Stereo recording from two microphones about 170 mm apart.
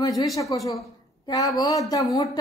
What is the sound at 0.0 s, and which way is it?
A woman's voice, 20° left (ahead or behind).